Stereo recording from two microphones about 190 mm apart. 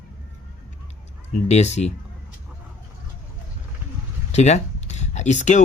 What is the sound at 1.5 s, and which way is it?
Speech, 35° left (ahead or behind).